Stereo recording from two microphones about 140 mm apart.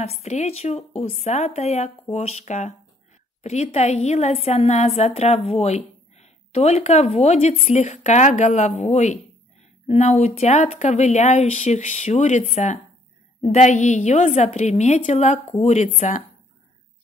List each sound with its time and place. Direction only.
0.0 s a woman's voice: 50° left (ahead or behind)